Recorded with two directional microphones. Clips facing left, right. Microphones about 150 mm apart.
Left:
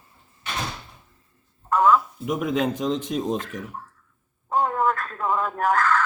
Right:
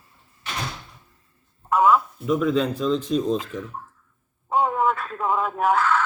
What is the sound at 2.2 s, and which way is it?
Speech, 15° left (ahead or behind).